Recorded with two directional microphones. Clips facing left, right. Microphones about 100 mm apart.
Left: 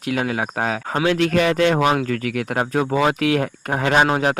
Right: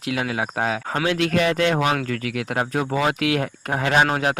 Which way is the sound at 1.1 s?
40° left (ahead or behind).